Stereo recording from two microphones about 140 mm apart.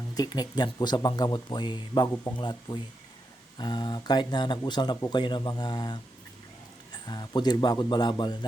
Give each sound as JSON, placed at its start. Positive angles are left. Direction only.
{"t": 0.1, "sound": "speech", "side_deg": 30}